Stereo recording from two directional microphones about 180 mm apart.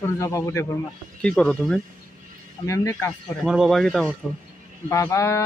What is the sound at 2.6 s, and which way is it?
Speech, 15° left (ahead or behind).